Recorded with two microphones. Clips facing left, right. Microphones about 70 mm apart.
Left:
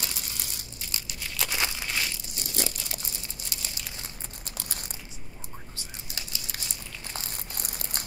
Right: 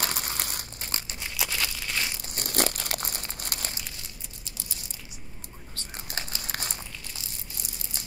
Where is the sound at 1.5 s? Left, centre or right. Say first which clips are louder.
Left 2 dB; left.